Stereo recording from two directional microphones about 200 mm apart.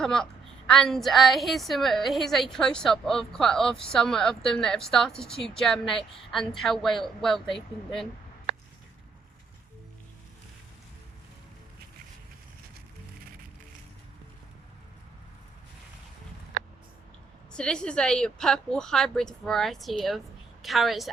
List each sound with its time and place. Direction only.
0.0 s a woman's voice: centre (ahead or behind)
17.5 s speech: 5° left (ahead or behind)